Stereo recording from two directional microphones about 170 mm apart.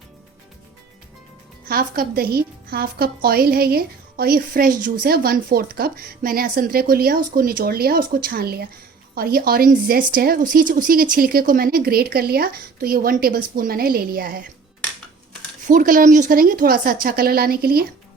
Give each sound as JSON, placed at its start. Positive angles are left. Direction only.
{"t": 1.6, "sound": "speech", "side_deg": -60}
{"t": 15.6, "sound": "speech", "side_deg": -50}